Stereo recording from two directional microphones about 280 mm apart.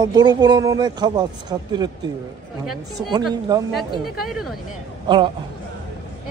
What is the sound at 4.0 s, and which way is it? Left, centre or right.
Speech, centre.